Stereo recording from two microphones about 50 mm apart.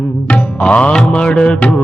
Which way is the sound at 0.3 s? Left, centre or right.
Left.